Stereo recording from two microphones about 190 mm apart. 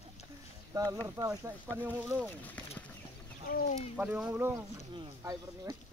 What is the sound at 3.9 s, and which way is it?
Speech, 5° right (ahead or behind).